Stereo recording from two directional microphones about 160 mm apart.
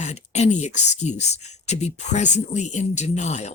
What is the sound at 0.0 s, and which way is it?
Speech, 45° left (ahead or behind).